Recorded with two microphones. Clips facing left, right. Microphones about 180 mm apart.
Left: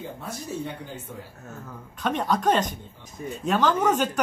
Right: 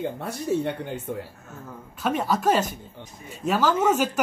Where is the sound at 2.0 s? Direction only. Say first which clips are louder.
Right 1 dB; 5° right (ahead or behind).